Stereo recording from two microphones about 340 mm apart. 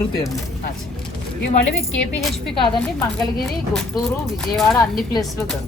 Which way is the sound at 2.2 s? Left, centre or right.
Centre.